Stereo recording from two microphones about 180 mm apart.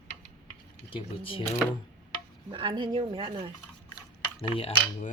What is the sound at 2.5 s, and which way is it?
Speech, 25° right (ahead or behind).